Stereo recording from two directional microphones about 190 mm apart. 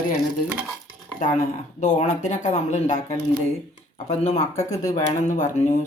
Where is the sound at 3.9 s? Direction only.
35° left (ahead or behind).